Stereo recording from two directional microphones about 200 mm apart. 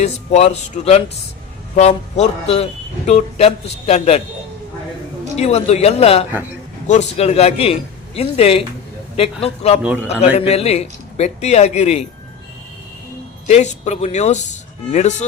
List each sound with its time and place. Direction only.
0.0 s a man's voice: 35° left (ahead or behind)
5.4 s a man's voice: 30° left (ahead or behind)
9.8 s a man's voice: 5° right (ahead or behind)
10.3 s a man's voice: 30° left (ahead or behind)
13.5 s a man's voice: 35° left (ahead or behind)